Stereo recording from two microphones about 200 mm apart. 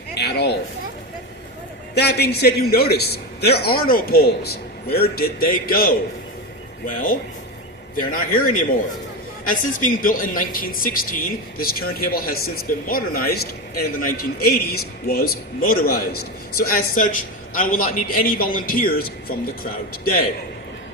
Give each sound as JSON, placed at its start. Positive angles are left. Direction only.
{"t": 0.1, "sound": "children playing", "side_deg": 55}
{"t": 2.0, "sound": "a man's voice", "side_deg": 55}